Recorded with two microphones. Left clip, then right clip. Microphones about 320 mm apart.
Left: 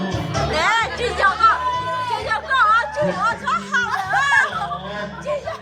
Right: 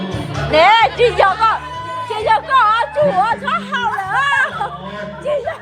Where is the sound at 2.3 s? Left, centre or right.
Centre.